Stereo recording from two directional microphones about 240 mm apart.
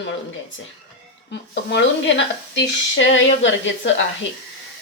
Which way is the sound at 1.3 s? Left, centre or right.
Left.